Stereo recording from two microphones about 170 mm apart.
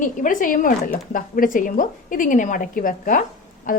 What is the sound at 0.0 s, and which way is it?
A woman's voice, 50° left (ahead or behind).